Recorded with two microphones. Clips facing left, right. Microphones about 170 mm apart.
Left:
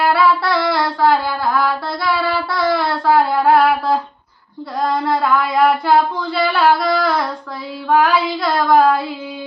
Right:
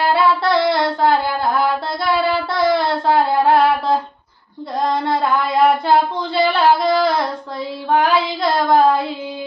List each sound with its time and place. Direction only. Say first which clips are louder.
0.1 s music: even; 25° right (ahead or behind)
3.4 s a sound: left 1 dB; 25° right (ahead or behind)
5.0 s child singing: left 1 dB; 25° right (ahead or behind)